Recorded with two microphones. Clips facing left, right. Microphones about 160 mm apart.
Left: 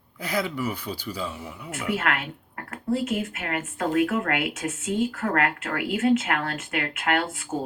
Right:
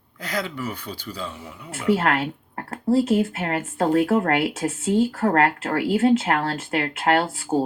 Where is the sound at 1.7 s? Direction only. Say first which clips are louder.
Right 6 dB; 35° right (ahead or behind).